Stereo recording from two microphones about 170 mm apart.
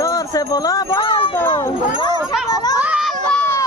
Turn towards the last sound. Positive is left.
turn(degrees=10)  # may be behind; listen again after turning